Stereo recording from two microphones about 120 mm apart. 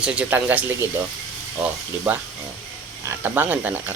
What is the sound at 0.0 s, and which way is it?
Speech, 10° right (ahead or behind).